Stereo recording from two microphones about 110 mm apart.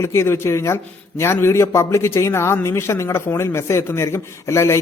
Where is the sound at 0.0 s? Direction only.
25° left (ahead or behind).